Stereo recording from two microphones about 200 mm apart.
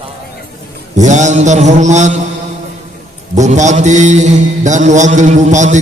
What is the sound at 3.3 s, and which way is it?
Mantra, 35° right (ahead or behind).